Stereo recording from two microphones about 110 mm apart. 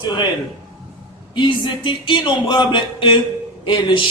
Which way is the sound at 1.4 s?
45° left (ahead or behind).